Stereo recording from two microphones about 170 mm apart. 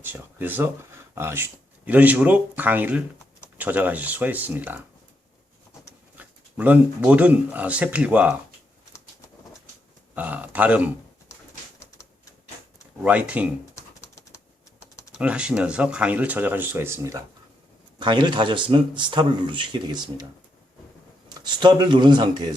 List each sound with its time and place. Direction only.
0.0 s speech: 10° right (ahead or behind)
6.1 s speech: 10° right (ahead or behind)
10.2 s speech: 10° right (ahead or behind)
11.8 s typewriter: 15° left (ahead or behind)
13.0 s speech: 5° right (ahead or behind)
13.7 s pigeon: 15° left (ahead or behind)
15.1 s speech: 5° right (ahead or behind)
18.0 s a man's voice: 25° right (ahead or behind)
21.2 s speech: 25° right (ahead or behind)